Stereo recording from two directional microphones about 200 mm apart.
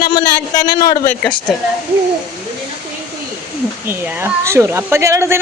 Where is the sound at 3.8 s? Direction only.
15° right (ahead or behind).